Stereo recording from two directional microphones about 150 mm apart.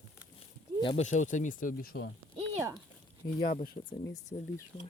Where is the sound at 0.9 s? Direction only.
55° left (ahead or behind); by 1.9 s 70° left (ahead or behind).